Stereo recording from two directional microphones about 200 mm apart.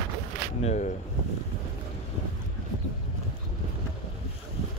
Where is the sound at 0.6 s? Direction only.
35° left (ahead or behind).